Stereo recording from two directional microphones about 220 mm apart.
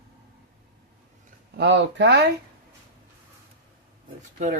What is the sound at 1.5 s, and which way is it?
Speech, 50° right (ahead or behind).